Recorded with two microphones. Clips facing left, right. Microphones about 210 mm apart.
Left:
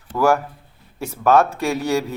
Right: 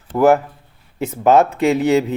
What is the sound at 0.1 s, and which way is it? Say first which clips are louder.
Speech: right 5 dB; 20° right (ahead or behind).